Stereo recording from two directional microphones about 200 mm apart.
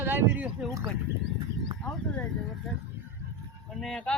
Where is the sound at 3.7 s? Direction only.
Centre (ahead or behind).